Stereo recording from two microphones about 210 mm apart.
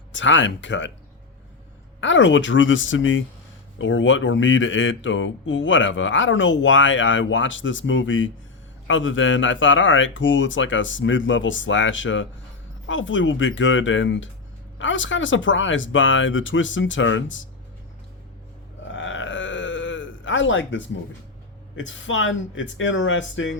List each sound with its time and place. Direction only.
0.1 s speech: 65° left (ahead or behind)
2.0 s speech: 65° left (ahead or behind)
18.9 s groan: 65° left (ahead or behind)
21.8 s speech: 65° left (ahead or behind)